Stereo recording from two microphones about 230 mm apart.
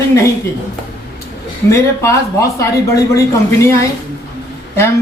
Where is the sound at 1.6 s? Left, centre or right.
Centre.